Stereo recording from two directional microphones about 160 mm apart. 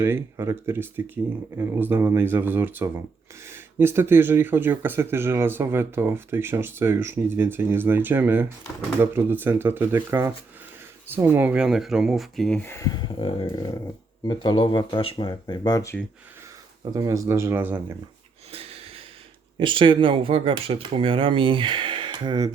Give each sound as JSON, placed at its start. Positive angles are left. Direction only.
{"t": 0.0, "sound": "speech", "side_deg": -15}
{"t": 13.1, "sound": "speech", "side_deg": 35}
{"t": 16.9, "sound": "speech", "side_deg": -25}
{"t": 18.5, "sound": "wheeze", "side_deg": -35}
{"t": 19.5, "sound": "speech", "side_deg": -30}